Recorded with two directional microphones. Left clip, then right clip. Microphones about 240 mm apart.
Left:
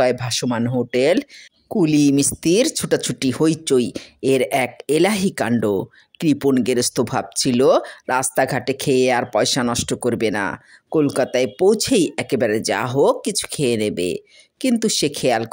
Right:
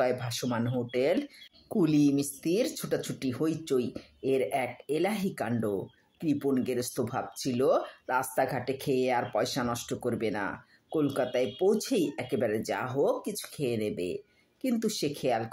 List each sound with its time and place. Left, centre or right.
0.0 s speech: left
1.7 s speech: left